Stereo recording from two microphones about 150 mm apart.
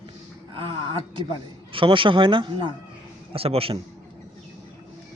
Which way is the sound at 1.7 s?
35° right (ahead or behind).